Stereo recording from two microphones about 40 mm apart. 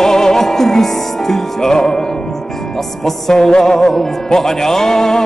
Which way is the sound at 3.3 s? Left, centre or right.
Centre.